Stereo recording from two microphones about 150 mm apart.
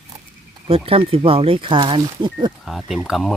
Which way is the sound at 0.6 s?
40° right (ahead or behind).